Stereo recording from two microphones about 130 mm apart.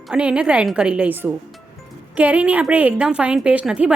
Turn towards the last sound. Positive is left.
turn(degrees=-10)  # may be behind; listen again after turning